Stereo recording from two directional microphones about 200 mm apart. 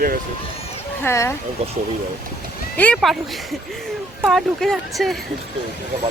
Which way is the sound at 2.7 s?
5° left (ahead or behind).